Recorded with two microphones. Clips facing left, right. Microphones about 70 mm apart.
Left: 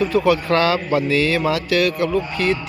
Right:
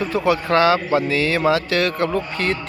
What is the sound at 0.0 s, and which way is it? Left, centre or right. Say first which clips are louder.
A man's voice: left 2 dB; right.